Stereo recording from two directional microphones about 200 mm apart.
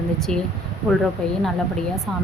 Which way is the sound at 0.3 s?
30° right (ahead or behind).